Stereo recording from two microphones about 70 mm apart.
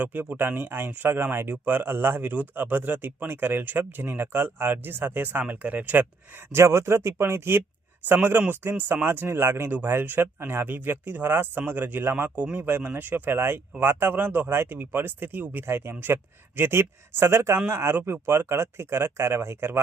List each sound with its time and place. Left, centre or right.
0.0 s speech: right
6.5 s speech: right